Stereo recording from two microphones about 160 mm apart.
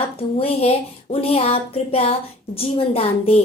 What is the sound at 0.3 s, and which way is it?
A woman's voice, 40° left (ahead or behind).